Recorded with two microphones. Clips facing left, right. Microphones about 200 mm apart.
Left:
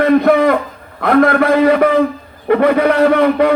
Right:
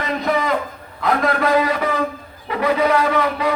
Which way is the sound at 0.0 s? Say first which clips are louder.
Left 11 dB; 55° left (ahead or behind).